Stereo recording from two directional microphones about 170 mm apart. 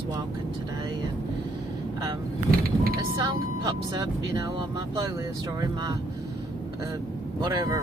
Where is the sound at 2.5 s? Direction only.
60° right (ahead or behind).